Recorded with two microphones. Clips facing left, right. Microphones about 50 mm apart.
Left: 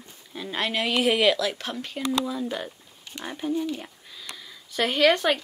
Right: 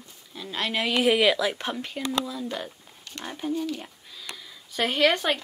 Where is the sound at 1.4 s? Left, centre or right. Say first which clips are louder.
Right 1 dB; centre.